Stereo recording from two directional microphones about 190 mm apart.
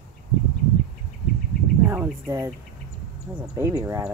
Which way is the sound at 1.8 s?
10° right (ahead or behind).